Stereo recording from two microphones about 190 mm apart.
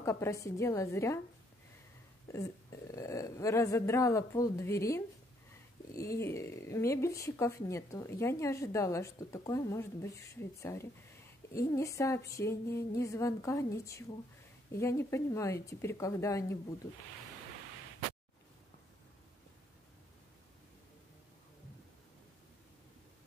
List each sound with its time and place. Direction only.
0.0 s a woman's voice: 15° left (ahead or behind)
2.3 s a woman's voice: 15° left (ahead or behind)